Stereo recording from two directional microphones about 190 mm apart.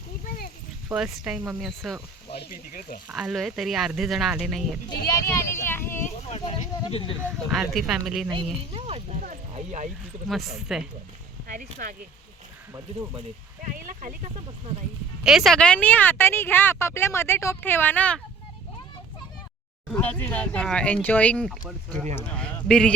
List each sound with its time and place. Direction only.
0.9 s speech: 5° right (ahead or behind)
2.4 s speech: 50° left (ahead or behind)
3.1 s speech: 5° right (ahead or behind)
5.0 s a sound: 15° left (ahead or behind)
6.2 s a sound: 30° left (ahead or behind)
7.3 s speech: 5° right (ahead or behind)
8.7 s a sound: 35° right (ahead or behind)
10.2 s speech: centre (ahead or behind)
11.8 s speech: 45° right (ahead or behind)
12.7 s speech: 15° right (ahead or behind)
13.7 s speech: 45° right (ahead or behind)
15.2 s a woman's voice: 5° right (ahead or behind)
19.9 s a woman's voice: 10° left (ahead or behind)